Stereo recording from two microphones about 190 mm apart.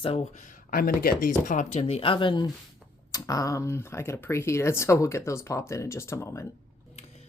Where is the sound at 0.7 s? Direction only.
50° left (ahead or behind); by 6.4 s 15° left (ahead or behind).